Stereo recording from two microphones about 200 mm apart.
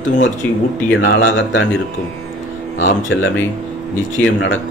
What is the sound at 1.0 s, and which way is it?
Speech, 70° left (ahead or behind).